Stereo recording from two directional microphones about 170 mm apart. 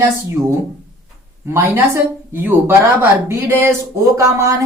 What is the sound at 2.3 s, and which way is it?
Speech, 10° right (ahead or behind).